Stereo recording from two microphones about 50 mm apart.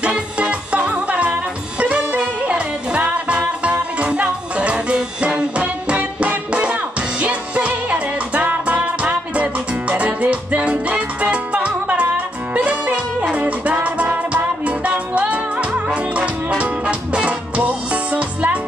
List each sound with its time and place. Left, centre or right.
0.1 s music: right